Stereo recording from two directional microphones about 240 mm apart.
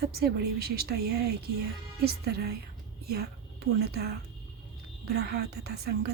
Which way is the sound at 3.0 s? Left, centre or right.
Right.